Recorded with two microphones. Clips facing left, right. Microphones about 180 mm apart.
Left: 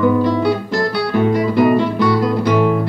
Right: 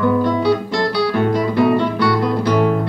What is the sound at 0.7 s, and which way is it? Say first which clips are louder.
Guitar: even; 5° left (ahead or behind).